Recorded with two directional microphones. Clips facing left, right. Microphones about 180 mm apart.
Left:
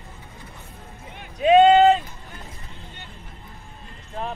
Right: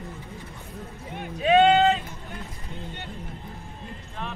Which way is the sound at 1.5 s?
35° left (ahead or behind).